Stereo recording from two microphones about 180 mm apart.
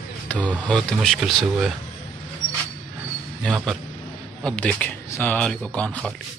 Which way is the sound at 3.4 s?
5° left (ahead or behind).